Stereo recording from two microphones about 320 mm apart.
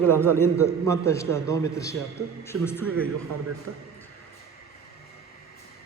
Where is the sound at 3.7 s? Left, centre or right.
Right.